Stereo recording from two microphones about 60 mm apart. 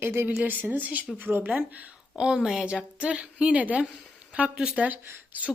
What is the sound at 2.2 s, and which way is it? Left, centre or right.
A woman's voice, centre.